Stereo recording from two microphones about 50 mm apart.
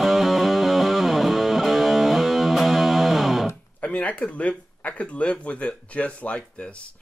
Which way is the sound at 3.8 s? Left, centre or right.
Left.